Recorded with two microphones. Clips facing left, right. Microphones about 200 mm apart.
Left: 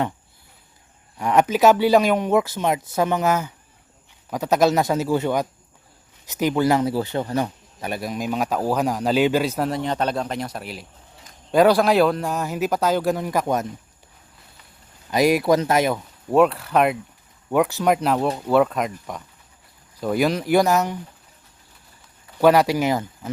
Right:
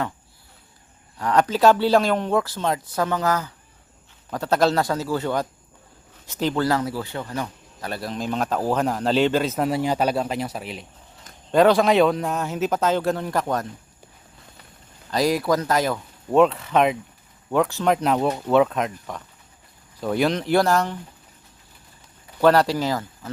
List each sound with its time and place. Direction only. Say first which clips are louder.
1.2 s speech: left 1 dB; 20° left (ahead or behind)
7.8 s speech: left 2 dB; 15° left (ahead or behind)
9.6 s speech: right 2 dB; 5° right (ahead or behind); by 13.7 s 15° left (ahead or behind)
15.1 s speech: left 3 dB; 20° left (ahead or behind)
16.3 s speech: even; 5° left (ahead or behind)
20.0 s speech: left 1 dB; 5° left (ahead or behind)
22.4 s speech: left 1 dB; 10° left (ahead or behind)